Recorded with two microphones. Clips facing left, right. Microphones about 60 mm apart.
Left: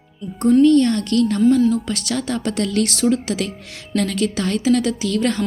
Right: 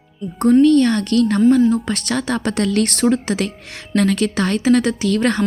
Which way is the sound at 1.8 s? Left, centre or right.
Right.